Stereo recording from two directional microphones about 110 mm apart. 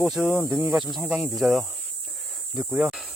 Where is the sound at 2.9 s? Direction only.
5° right (ahead or behind).